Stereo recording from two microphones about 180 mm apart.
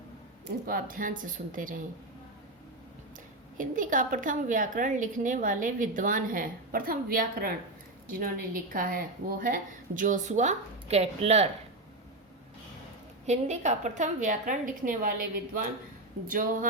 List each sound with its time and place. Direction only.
0.7 s a woman's voice: 50° right (ahead or behind)
3.6 s a woman's voice: 45° right (ahead or behind)
13.2 s a woman's voice: 40° right (ahead or behind)